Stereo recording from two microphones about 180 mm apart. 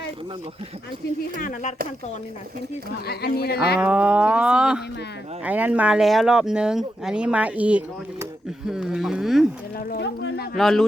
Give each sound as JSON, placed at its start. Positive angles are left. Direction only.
{"t": 1.4, "sound": "speech", "side_deg": 45}
{"t": 3.1, "sound": "speech", "side_deg": 60}
{"t": 3.8, "sound": "speech", "side_deg": -10}
{"t": 9.7, "sound": "speech", "side_deg": 65}
{"t": 10.6, "sound": "speech", "side_deg": 0}